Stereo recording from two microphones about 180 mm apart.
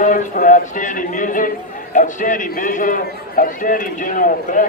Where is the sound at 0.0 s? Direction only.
45° left (ahead or behind).